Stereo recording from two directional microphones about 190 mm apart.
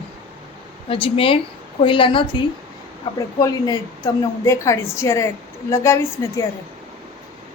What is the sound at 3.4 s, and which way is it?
A woman's voice, 20° left (ahead or behind).